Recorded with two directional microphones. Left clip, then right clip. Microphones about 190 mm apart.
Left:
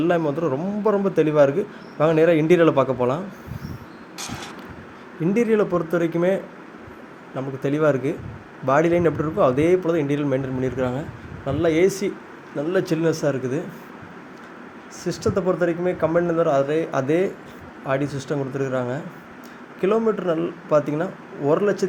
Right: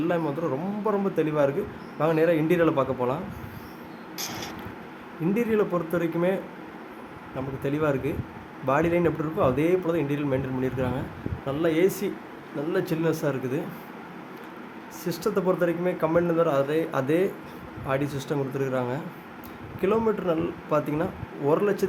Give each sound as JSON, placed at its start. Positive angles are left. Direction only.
{"t": 0.0, "sound": "a man's voice", "side_deg": 20}
{"t": 4.2, "sound": "vehicle", "side_deg": -15}
{"t": 5.3, "sound": "a man's voice", "side_deg": 25}
{"t": 15.0, "sound": "a man's voice", "side_deg": 10}